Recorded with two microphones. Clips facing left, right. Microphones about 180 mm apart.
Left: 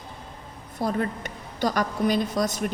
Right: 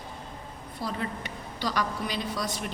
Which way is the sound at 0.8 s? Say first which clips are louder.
Left 7 dB; 50° left (ahead or behind).